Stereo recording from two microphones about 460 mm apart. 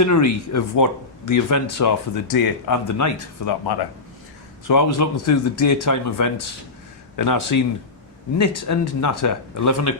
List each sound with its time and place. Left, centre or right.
0.0 s speech: left